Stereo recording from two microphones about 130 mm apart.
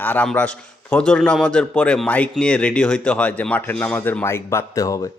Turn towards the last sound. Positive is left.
turn(degrees=25)  # may be behind; listen again after turning